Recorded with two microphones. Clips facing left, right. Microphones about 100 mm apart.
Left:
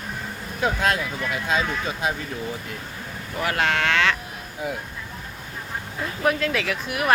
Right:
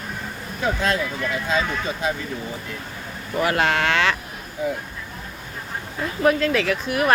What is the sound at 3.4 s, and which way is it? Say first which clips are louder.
Speech: right 2 dB; 5° right (ahead or behind).